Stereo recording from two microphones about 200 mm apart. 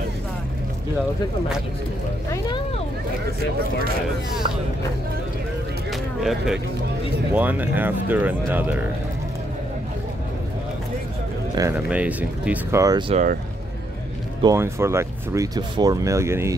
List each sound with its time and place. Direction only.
5.9 s a sound: centre (ahead or behind)
7.3 s speech: 10° right (ahead or behind)
11.5 s speech: 15° right (ahead or behind)
13.1 s speech: 40° right (ahead or behind)
14.4 s speech: 15° right (ahead or behind)